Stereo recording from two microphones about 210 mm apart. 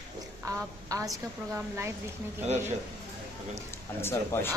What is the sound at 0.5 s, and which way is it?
A woman's voice, 15° right (ahead or behind).